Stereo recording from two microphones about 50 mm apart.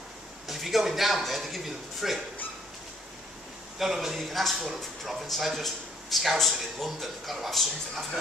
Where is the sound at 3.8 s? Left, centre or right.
Centre.